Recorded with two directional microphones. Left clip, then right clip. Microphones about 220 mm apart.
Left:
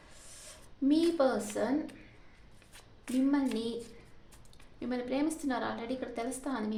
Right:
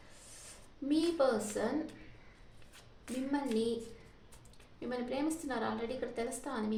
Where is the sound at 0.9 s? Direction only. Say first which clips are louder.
Left 3 dB; 40° left (ahead or behind).